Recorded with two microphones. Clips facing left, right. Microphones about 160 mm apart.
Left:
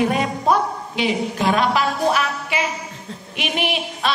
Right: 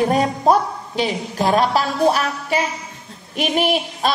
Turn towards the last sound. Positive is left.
turn(degrees=-40)  # may be behind; listen again after turning